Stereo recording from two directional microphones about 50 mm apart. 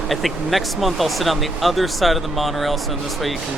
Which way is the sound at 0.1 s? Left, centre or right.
Centre.